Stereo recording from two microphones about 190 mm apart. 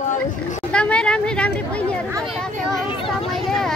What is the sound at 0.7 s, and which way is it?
Speech, 5° left (ahead or behind).